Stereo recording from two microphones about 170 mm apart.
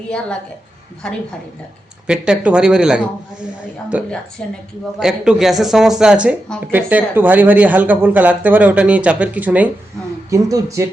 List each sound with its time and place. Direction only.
1.0 s speech: 5° left (ahead or behind)
4.4 s a woman's voice: 5° left (ahead or behind)
4.9 s speech: 5° right (ahead or behind)